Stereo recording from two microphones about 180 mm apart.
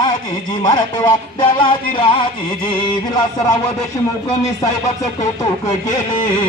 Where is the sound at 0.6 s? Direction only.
20° left (ahead or behind).